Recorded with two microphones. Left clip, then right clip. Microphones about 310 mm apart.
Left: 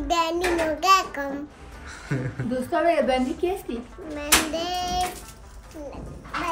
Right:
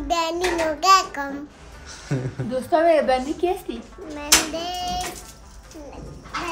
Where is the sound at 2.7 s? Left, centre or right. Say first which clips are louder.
Right 4 dB; right.